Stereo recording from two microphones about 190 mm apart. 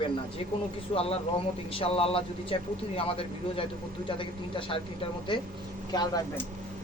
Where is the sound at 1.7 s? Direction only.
30° left (ahead or behind).